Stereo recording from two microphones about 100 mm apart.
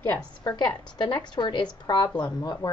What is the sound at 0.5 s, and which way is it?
Speech, 10° left (ahead or behind).